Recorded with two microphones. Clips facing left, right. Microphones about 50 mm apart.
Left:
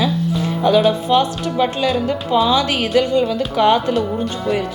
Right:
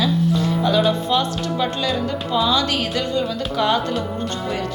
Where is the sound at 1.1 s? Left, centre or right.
Left.